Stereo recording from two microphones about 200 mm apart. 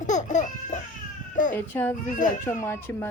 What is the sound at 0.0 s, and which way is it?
Baby cry, 40° left (ahead or behind).